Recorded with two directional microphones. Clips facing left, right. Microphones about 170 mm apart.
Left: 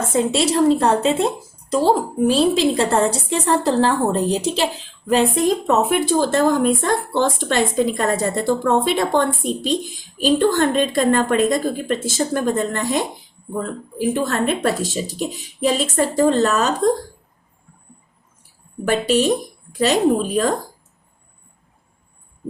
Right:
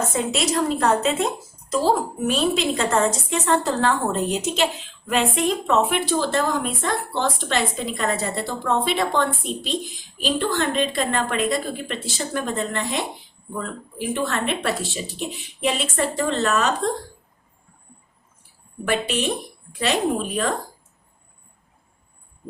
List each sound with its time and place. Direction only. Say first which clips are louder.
0.1 s speech: left 5 dB; 30° left (ahead or behind)
18.9 s speech: left 6 dB; 40° left (ahead or behind)